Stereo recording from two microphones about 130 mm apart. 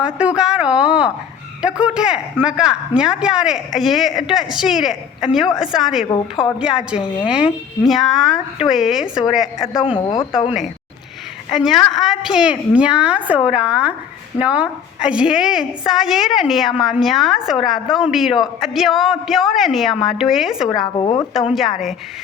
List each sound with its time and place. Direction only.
0.0 s a woman's voice: 10° right (ahead or behind)
6.1 s a woman's voice: 35° left (ahead or behind)
6.6 s a woman's voice: 5° right (ahead or behind)
11.5 s a woman's voice: centre (ahead or behind)
20.7 s a woman's voice: 35° left (ahead or behind)
21.5 s a woman's voice: centre (ahead or behind)